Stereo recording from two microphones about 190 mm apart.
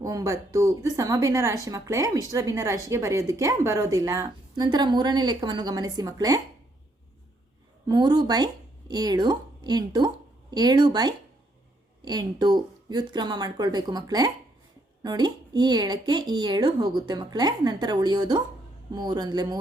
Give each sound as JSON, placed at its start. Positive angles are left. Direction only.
{"t": 0.0, "sound": "a woman's voice", "side_deg": -20}
{"t": 7.9, "sound": "speech", "side_deg": -20}